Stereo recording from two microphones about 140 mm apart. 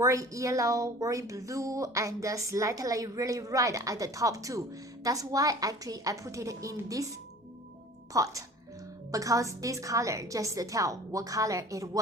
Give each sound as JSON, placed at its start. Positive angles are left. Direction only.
{"t": 0.0, "sound": "a woman's voice", "side_deg": -25}
{"t": 8.1, "sound": "a woman's voice", "side_deg": -25}